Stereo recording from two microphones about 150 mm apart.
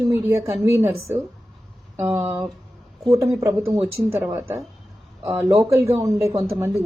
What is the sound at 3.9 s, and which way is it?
A woman's voice, 15° right (ahead or behind).